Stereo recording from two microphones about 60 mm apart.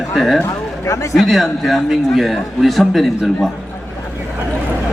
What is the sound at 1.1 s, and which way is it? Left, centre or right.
A man's voice, centre.